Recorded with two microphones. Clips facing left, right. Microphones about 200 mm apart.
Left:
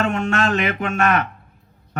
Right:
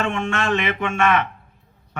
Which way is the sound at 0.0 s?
40° left (ahead or behind).